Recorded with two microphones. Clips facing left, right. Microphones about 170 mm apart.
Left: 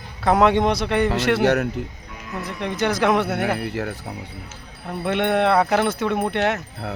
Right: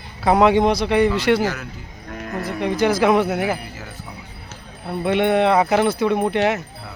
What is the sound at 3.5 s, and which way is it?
Speech, 70° left (ahead or behind).